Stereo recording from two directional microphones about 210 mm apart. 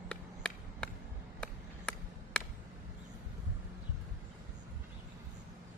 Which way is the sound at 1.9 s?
5° left (ahead or behind).